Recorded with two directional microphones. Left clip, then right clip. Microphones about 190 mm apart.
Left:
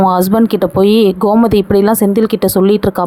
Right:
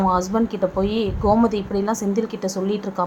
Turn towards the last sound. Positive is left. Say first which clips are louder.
# left 12 dB
turn(degrees=45)  # may be behind; listen again after turning